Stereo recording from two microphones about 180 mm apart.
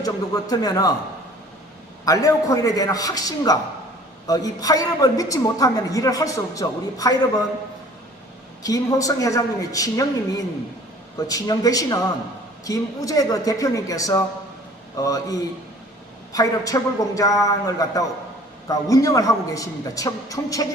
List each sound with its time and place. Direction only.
0.0 s a man's voice: 20° left (ahead or behind)
2.0 s a man's voice: 20° left (ahead or behind)
8.6 s a man's voice: 20° left (ahead or behind)